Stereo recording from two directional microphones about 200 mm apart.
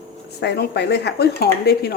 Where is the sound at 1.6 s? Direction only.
55° left (ahead or behind).